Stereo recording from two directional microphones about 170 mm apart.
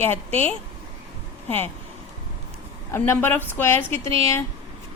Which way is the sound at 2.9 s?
15° left (ahead or behind).